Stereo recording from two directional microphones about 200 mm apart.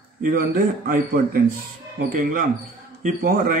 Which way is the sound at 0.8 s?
45° right (ahead or behind).